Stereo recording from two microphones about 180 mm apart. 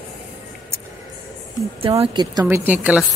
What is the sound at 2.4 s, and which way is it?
Speech, 10° right (ahead or behind).